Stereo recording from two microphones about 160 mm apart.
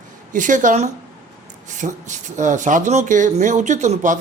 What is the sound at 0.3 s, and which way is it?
Speech, 55° right (ahead or behind).